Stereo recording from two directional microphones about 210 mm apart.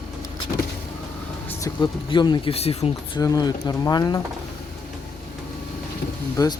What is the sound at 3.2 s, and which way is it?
Speech, 20° left (ahead or behind).